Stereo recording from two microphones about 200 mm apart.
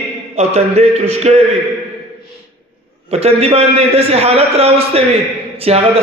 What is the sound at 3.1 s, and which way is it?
A man's voice, 30° right (ahead or behind).